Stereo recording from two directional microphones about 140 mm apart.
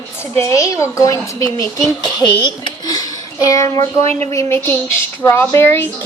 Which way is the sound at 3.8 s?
50° right (ahead or behind).